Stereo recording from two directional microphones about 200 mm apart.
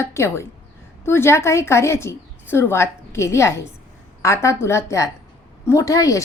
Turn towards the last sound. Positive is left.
turn(degrees=15)  # may be behind; listen again after turning